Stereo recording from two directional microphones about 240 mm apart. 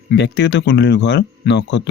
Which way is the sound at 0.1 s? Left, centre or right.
Left.